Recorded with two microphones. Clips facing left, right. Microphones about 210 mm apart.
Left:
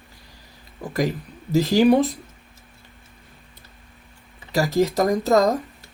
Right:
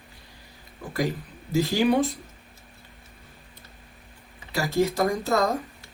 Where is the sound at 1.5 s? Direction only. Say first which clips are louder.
Left 5 dB; 40° left (ahead or behind).